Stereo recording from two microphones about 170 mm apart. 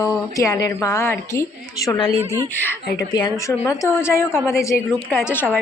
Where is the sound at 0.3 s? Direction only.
20° left (ahead or behind).